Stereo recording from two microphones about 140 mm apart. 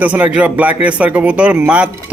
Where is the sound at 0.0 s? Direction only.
10° right (ahead or behind).